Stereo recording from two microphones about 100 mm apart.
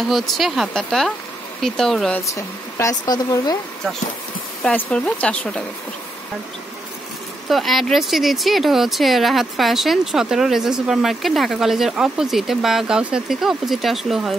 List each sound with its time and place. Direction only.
0.1 s speech: centre (ahead or behind)
2.2 s speech: 30° left (ahead or behind)
4.6 s speech: 10° left (ahead or behind)
7.4 s speech: centre (ahead or behind)